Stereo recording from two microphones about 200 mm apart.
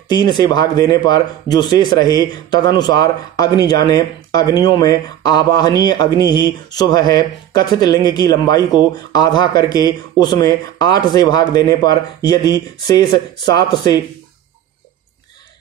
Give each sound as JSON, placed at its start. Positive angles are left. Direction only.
{"t": 0.1, "sound": "speech", "side_deg": 20}